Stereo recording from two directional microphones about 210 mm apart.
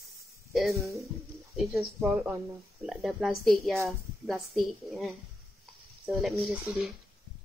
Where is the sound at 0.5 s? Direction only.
Centre (ahead or behind).